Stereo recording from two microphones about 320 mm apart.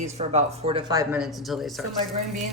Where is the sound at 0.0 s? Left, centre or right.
Right; by 1.7 s centre.